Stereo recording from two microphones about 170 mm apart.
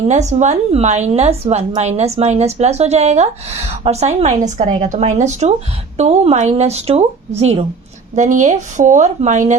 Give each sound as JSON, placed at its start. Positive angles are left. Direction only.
{"t": 0.1, "sound": "a woman's voice", "side_deg": -45}